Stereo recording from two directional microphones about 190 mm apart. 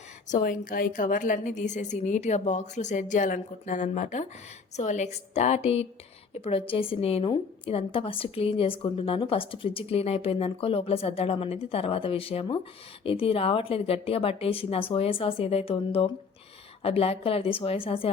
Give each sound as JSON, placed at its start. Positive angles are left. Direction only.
{"t": 0.3, "sound": "a woman's voice", "side_deg": 45}